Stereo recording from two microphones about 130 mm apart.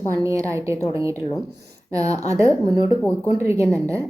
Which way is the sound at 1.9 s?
25° right (ahead or behind).